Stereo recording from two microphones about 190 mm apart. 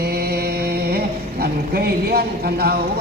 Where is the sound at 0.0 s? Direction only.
55° right (ahead or behind).